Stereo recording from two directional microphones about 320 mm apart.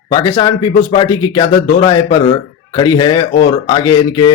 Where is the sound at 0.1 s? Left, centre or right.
Centre.